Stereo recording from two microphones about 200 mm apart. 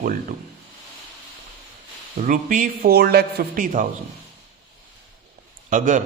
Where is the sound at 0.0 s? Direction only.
40° right (ahead or behind).